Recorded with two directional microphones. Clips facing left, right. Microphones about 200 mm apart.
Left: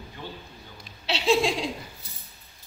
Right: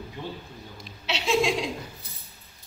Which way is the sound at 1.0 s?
35° left (ahead or behind).